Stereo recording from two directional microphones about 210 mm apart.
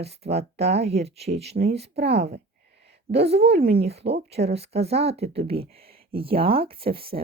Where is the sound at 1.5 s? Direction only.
50° right (ahead or behind).